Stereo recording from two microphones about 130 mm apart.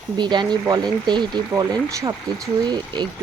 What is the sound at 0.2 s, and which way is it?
Speech, 35° right (ahead or behind).